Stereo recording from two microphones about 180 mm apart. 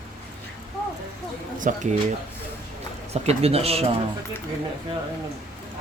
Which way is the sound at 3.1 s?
35° right (ahead or behind).